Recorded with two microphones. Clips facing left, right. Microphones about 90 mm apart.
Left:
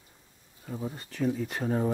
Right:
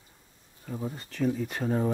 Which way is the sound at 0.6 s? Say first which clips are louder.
Right 1 dB; 5° left (ahead or behind).